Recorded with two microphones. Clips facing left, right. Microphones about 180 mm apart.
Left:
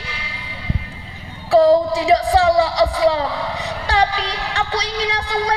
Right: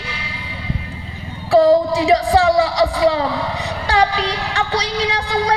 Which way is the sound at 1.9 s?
35° left (ahead or behind).